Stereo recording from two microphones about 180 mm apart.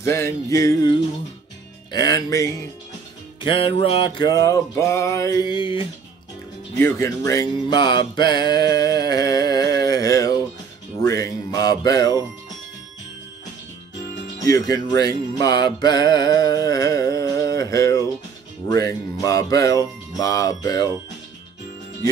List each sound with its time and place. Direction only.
0.0 s music: 15° left (ahead or behind)
3.3 s music: 30° left (ahead or behind)
6.8 s music: 15° left (ahead or behind)
14.4 s music: 20° left (ahead or behind)